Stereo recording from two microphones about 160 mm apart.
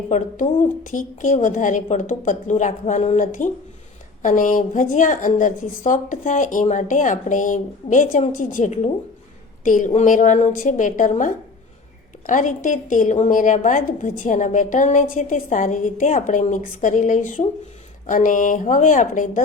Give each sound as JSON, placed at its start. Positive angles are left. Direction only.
{"t": 0.1, "sound": "a woman's voice", "side_deg": 50}